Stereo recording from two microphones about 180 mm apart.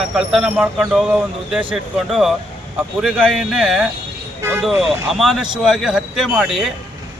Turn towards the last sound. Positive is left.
turn(degrees=0)  # may be behind; listen again after turning